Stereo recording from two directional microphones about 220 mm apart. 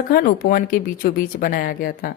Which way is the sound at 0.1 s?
40° left (ahead or behind).